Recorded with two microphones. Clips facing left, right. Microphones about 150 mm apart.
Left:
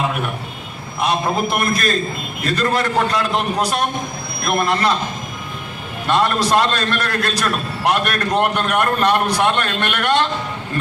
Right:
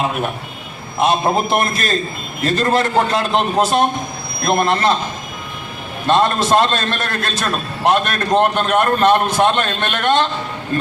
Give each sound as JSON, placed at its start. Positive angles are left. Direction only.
{"t": 1.0, "sound": "a man's voice", "side_deg": -25}
{"t": 6.1, "sound": "a man's voice", "side_deg": -25}